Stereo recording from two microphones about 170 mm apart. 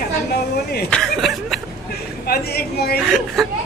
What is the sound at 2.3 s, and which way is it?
Speech, 70° left (ahead or behind).